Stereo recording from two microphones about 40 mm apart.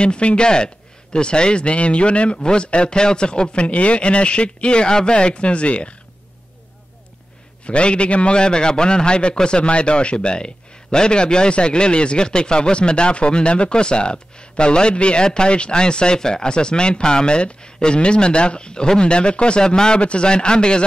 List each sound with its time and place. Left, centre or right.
0.0 s a man's voice: left
7.6 s a man's voice: left